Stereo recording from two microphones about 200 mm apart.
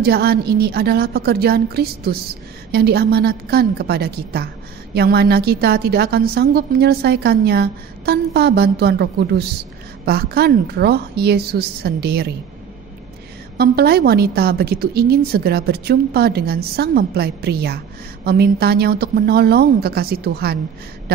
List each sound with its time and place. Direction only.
0.0 s a woman's voice: 50° right (ahead or behind)
13.6 s a woman's voice: 50° right (ahead or behind)